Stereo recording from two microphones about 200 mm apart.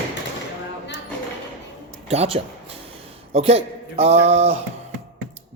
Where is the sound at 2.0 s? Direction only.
30° right (ahead or behind).